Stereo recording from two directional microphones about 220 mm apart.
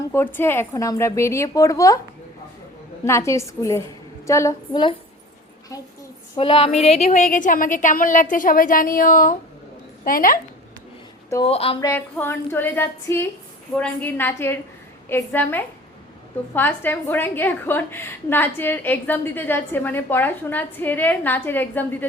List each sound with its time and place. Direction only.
0.1 s a woman's voice: 10° left (ahead or behind)
3.0 s a woman's voice: 10° left (ahead or behind)
6.3 s a woman's voice: 25° left (ahead or behind); by 10.4 s 40° left (ahead or behind)
11.4 s speech: 25° left (ahead or behind)
11.9 s a woman's voice: 10° left (ahead or behind)